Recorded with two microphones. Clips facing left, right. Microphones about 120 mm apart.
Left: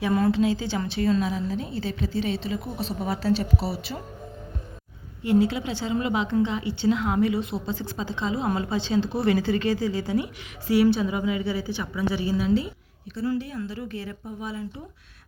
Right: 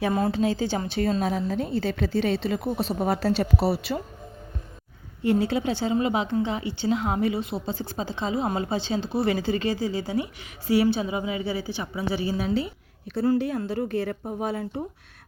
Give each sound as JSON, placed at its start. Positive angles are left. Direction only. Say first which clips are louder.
{"t": 0.2, "sound": "a woman's voice", "louder": "left 1 dB", "side_deg": -45}
{"t": 5.5, "sound": "speech", "louder": "right 3 dB", "side_deg": -40}
{"t": 6.3, "sound": "a woman's voice", "louder": "left 2 dB", "side_deg": -20}
{"t": 13.1, "sound": "a woman's voice", "louder": "right 5 dB", "side_deg": -55}